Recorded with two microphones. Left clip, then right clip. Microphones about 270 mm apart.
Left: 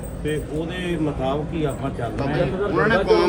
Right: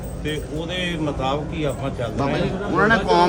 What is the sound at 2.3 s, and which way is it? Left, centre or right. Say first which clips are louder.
Speech: left 1 dB; right.